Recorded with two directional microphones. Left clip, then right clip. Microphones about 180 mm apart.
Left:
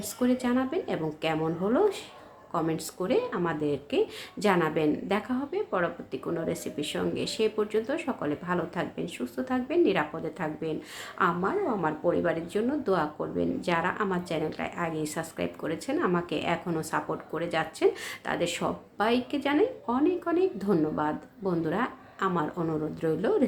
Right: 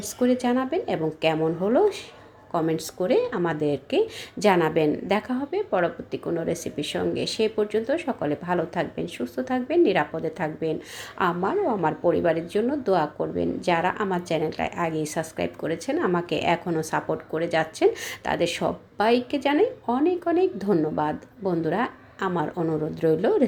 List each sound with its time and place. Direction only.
0.2 s a woman's voice: 15° right (ahead or behind)